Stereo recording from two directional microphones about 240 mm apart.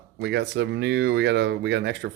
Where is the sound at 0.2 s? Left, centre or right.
Right.